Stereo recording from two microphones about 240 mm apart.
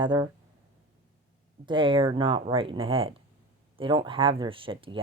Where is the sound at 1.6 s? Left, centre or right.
Right.